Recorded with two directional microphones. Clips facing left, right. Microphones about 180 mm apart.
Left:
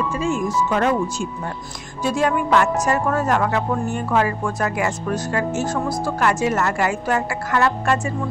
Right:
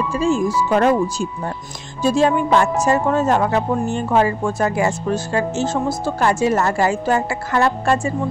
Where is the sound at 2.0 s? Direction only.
25° right (ahead or behind).